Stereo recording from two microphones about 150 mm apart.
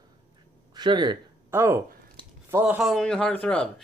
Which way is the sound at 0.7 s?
30° right (ahead or behind).